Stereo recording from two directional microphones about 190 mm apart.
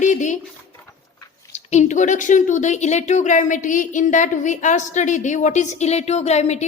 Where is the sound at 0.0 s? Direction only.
40° left (ahead or behind).